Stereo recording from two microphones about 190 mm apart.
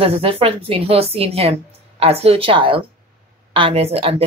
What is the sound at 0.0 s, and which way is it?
Speech, 30° right (ahead or behind).